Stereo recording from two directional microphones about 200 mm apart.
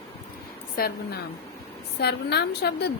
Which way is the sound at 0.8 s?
50° left (ahead or behind).